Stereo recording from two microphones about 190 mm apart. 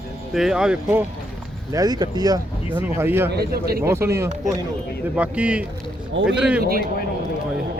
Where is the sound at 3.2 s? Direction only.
55° right (ahead or behind).